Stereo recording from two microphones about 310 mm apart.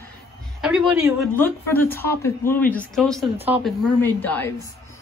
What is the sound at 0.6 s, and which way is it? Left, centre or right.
Speech, centre.